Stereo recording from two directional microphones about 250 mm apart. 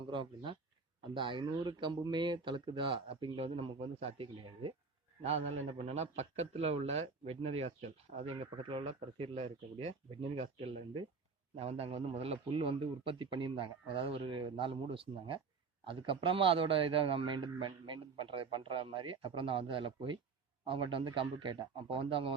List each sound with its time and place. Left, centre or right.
0.1 s a man's voice: centre